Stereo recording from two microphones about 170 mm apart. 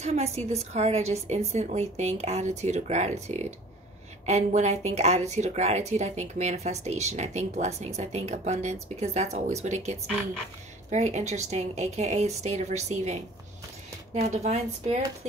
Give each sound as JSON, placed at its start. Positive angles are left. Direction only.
{"t": 0.0, "sound": "speech", "side_deg": -40}
{"t": 14.2, "sound": "speech", "side_deg": -40}